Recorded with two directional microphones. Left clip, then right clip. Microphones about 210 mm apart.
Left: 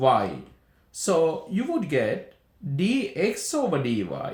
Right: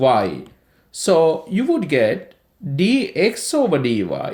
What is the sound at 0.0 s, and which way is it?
Speech, 40° right (ahead or behind).